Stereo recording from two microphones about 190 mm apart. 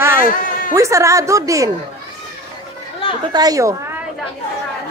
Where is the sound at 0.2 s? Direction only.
45° left (ahead or behind).